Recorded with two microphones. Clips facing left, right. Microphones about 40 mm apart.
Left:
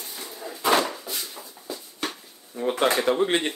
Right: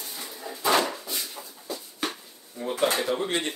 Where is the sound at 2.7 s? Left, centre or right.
Left.